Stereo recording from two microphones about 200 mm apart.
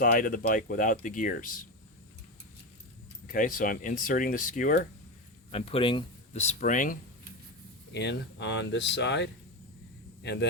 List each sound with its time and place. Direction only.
0.0 s speech: 45° left (ahead or behind)
3.2 s speech: 40° left (ahead or behind)
5.5 s speech: 30° left (ahead or behind)
7.9 s speech: 60° left (ahead or behind)